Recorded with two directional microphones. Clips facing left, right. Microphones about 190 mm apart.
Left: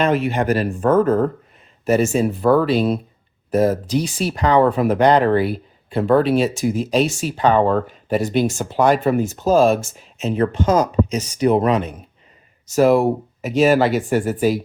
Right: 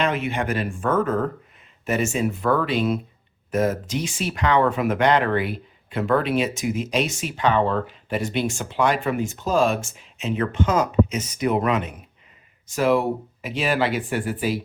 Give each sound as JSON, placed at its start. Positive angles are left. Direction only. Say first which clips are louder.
{"t": 0.0, "sound": "speech", "louder": "left 6 dB", "side_deg": 40}